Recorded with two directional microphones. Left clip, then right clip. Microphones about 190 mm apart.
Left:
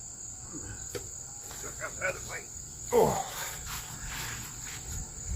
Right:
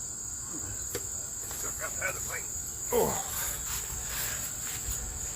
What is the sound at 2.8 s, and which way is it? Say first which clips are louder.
Cricket: left 3 dB; 20° left (ahead or behind).